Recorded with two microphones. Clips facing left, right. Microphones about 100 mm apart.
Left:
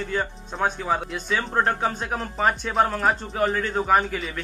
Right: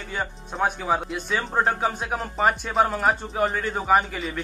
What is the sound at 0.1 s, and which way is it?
Speech, 5° right (ahead or behind).